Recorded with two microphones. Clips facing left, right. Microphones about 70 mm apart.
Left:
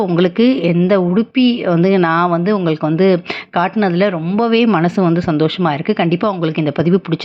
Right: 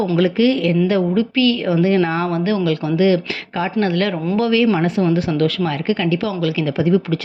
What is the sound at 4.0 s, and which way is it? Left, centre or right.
Speech, left.